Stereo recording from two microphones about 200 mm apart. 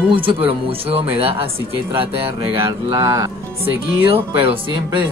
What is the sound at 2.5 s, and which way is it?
Speech, 20° right (ahead or behind).